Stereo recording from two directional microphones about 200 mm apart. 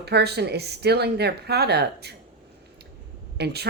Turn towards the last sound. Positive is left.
turn(degrees=-55)  # may be behind; listen again after turning